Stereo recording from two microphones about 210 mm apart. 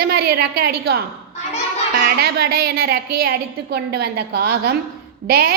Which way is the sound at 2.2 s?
50° right (ahead or behind).